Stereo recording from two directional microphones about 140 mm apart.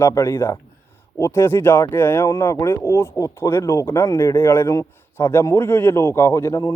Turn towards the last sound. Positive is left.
turn(degrees=25)  # may be behind; listen again after turning